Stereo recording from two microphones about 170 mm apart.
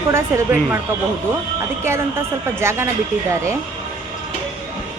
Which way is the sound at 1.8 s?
15° right (ahead or behind).